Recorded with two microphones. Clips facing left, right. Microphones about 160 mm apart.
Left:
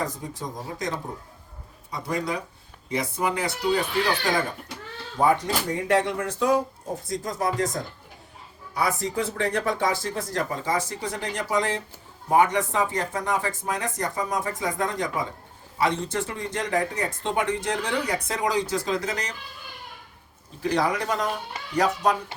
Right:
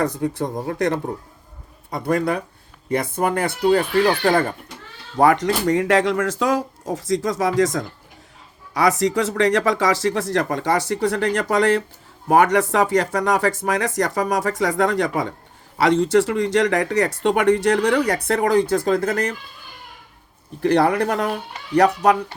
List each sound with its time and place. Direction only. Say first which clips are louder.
0.0 s speech: right 9 dB; 70° right (ahead or behind)
5.1 s speech: right 6 dB; 80° right; by 19.4 s 55° right (ahead or behind)
20.6 s speech: right 7 dB; 60° right (ahead or behind)